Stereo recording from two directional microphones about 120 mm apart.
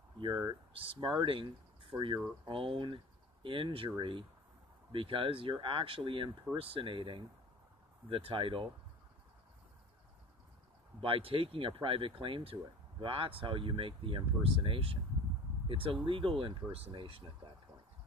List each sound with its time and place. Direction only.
0.7 s speech: 45° right (ahead or behind)
11.0 s speech: 50° right (ahead or behind)